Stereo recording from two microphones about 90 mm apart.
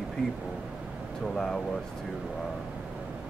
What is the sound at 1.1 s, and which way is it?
Speech, 5° left (ahead or behind).